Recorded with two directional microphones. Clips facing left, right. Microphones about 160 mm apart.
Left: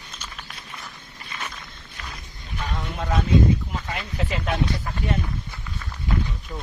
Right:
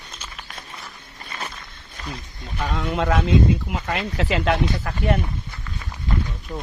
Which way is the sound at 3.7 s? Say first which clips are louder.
Right 5 dB; 85° right.